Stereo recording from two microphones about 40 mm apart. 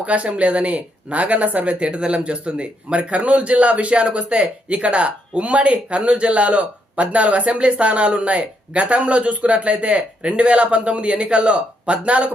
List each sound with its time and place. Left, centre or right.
0.0 s speech: right